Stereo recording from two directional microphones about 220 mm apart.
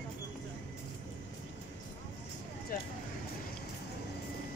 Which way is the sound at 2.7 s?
40° left (ahead or behind).